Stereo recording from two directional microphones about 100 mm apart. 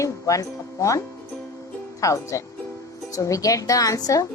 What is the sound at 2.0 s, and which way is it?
A woman's voice, 30° left (ahead or behind).